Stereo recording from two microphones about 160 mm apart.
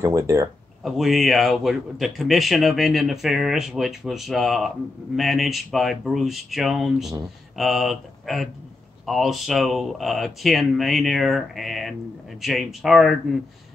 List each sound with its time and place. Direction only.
0.0 s speech: 20° right (ahead or behind)
0.8 s a man's voice: centre (ahead or behind)